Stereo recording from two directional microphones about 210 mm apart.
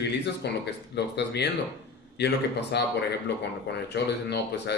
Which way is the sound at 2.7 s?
50° left (ahead or behind).